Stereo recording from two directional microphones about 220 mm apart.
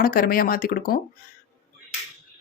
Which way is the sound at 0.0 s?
40° left (ahead or behind).